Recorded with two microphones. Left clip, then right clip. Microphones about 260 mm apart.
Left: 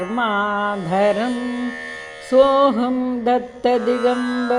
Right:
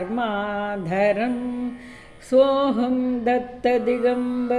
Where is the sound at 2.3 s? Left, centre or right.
Centre.